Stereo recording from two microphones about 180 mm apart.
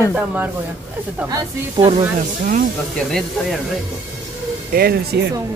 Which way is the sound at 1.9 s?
40° right (ahead or behind).